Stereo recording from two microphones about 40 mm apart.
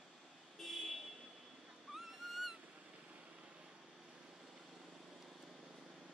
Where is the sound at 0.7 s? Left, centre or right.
Centre.